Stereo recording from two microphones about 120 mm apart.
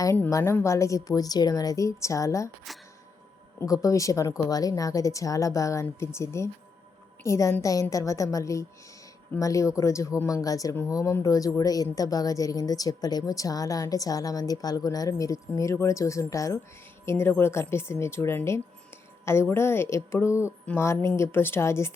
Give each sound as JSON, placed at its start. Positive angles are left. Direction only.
{"t": 0.3, "sound": "speech", "side_deg": 25}
{"t": 3.6, "sound": "speech", "side_deg": 30}